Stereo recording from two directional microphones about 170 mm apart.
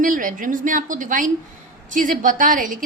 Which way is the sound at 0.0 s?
50° right (ahead or behind).